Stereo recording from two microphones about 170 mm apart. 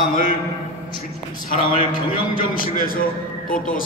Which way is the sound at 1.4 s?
55° left (ahead or behind).